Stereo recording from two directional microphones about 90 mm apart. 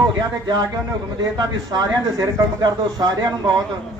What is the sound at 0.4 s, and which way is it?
Speech, 45° right (ahead or behind).